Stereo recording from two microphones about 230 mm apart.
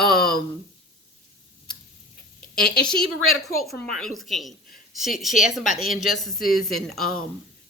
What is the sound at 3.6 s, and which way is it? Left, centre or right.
Speech, centre.